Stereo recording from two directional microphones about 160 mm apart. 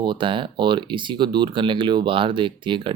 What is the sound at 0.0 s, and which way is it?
Speech, 30° right (ahead or behind).